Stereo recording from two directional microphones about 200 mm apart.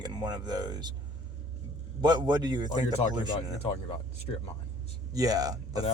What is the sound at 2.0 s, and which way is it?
Speech, 20° right (ahead or behind).